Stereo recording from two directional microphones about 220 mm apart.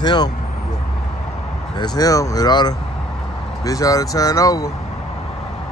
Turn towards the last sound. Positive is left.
turn(degrees=15)  # may be behind; listen again after turning